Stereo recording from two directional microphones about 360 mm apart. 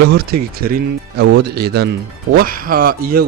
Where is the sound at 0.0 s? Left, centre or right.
Right.